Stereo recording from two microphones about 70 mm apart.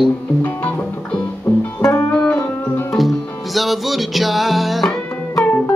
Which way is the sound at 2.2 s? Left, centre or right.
Left.